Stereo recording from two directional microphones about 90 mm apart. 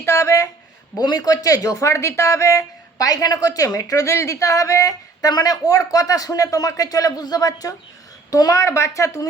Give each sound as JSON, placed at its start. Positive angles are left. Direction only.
{"t": 0.0, "sound": "speech", "side_deg": 30}
{"t": 0.9, "sound": "speech", "side_deg": 45}